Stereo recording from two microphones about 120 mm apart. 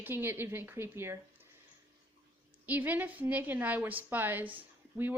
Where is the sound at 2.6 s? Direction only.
15° right (ahead or behind).